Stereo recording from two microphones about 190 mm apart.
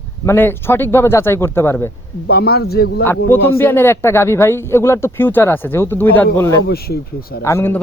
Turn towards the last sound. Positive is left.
turn(degrees=15)  # may be behind; listen again after turning